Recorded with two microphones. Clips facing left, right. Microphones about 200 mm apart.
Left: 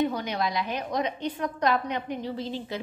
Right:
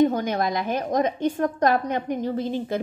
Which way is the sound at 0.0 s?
45° right (ahead or behind).